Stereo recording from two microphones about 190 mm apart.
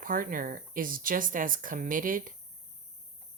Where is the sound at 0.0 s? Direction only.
45° right (ahead or behind).